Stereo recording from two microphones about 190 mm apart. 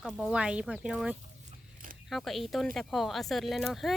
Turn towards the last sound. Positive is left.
turn(degrees=0)  # may be behind; listen again after turning